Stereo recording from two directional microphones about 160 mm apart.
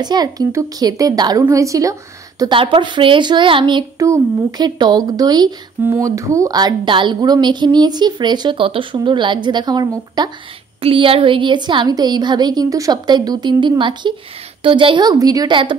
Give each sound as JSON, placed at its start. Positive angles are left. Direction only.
{"t": 0.0, "sound": "speech", "side_deg": -25}